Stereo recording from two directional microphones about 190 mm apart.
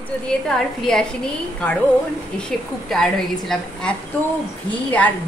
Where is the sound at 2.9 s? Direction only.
Centre (ahead or behind).